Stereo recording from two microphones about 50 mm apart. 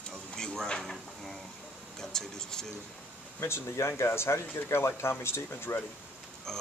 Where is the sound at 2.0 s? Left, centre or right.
Centre.